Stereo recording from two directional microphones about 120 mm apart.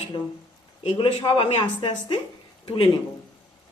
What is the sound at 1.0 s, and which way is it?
A woman's voice, 50° left (ahead or behind).